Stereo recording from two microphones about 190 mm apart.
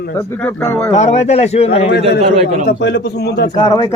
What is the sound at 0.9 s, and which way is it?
Speech, 35° left (ahead or behind).